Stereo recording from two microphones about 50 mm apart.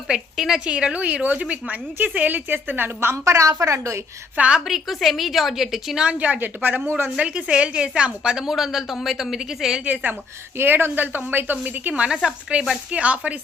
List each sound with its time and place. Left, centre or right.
0.3 s a woman's voice: centre
0.6 s a woman's voice: centre; by 3.2 s right
3.2 s a woman's voice: right
4.4 s speech: right
4.6 s a woman's voice: centre
6.0 s speech: right
6.6 s a woman's voice: right
7.2 s a woman's voice: centre
9.8 s a woman's voice: right
10.6 s a woman's voice: right
11.9 s a woman's voice: centre
12.6 s speech: right